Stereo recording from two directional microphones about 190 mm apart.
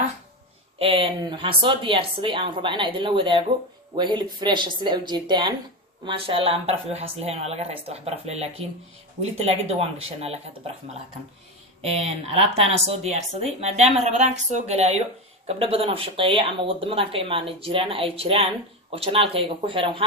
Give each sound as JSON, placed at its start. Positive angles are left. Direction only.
{"t": 0.8, "sound": "speech", "side_deg": -30}
{"t": 11.8, "sound": "speech", "side_deg": -35}